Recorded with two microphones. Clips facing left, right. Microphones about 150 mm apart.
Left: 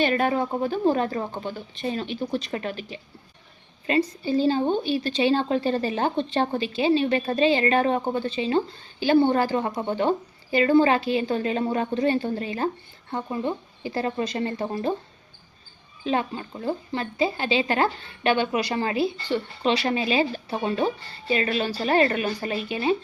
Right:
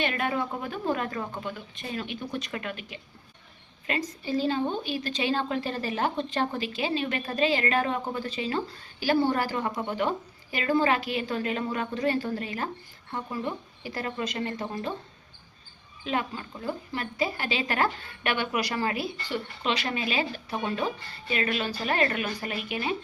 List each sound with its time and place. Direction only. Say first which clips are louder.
0.0 s a woman's voice: left 6 dB; 35° left (ahead or behind)
16.0 s a woman's voice: left 5 dB; 30° left (ahead or behind)